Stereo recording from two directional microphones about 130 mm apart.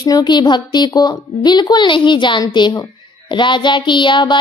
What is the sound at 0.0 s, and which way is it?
A woman's voice, 30° left (ahead or behind).